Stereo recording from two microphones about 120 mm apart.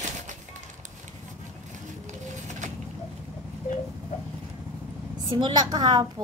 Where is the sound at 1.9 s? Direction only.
90° right.